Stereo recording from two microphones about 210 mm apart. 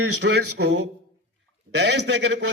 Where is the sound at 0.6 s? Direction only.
60° right (ahead or behind).